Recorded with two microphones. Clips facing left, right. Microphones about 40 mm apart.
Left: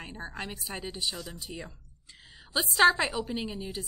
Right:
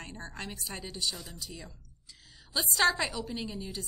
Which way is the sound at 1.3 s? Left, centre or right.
Left.